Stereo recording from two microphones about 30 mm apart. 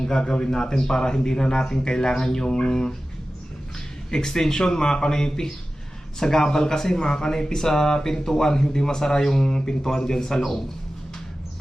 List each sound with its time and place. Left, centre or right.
0.0 s speech: left
4.1 s speech: centre